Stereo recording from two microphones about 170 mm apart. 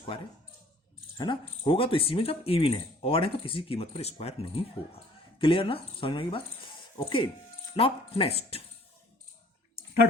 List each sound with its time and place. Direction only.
1.2 s speech: 25° left (ahead or behind)